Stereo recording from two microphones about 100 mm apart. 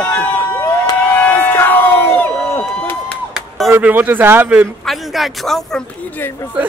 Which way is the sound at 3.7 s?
20° right (ahead or behind).